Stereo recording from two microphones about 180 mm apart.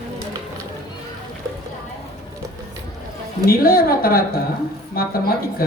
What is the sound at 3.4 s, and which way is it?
A man's voice, 55° left (ahead or behind).